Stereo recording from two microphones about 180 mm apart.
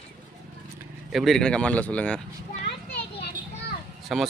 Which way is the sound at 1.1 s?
Centre (ahead or behind).